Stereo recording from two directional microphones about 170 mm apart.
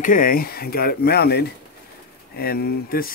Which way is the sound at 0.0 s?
55° left (ahead or behind).